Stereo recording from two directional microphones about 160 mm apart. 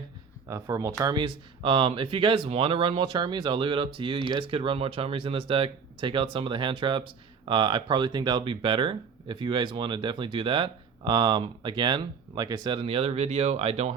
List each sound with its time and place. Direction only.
0.4 s speech: 20° right (ahead or behind); by 13.9 s 40° right (ahead or behind)